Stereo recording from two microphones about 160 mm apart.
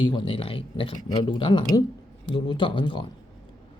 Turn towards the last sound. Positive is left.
turn(degrees=30)  # may be behind; listen again after turning